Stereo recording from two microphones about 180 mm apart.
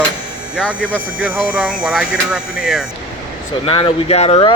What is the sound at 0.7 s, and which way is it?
Speech, 10° right (ahead or behind).